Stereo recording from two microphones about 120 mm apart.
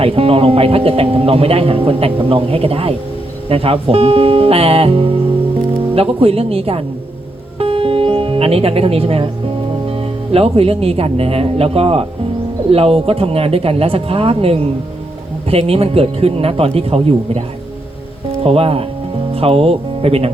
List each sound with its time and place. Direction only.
0.0 s speech: 50° right (ahead or behind)
7.6 s music: 50° right (ahead or behind)
9.9 s speech: 50° right (ahead or behind)
18.4 s speech: 55° right (ahead or behind)